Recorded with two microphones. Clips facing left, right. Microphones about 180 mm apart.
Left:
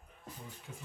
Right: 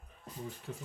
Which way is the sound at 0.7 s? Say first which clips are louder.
Right 7 dB; 65° right (ahead or behind).